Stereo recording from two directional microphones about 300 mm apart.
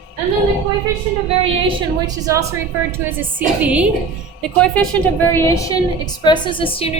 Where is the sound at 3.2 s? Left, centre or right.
Centre.